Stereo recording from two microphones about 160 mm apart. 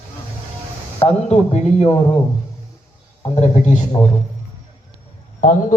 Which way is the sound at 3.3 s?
45° left (ahead or behind).